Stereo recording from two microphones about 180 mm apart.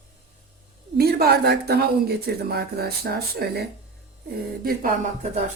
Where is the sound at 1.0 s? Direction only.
60° right (ahead or behind).